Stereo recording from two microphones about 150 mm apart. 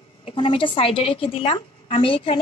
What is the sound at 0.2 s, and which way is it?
A woman's voice, 35° left (ahead or behind).